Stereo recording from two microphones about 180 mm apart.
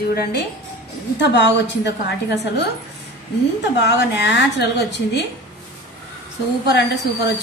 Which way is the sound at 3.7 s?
75° left (ahead or behind).